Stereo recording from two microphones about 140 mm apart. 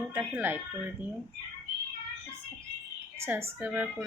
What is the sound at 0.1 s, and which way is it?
Speech, 15° right (ahead or behind).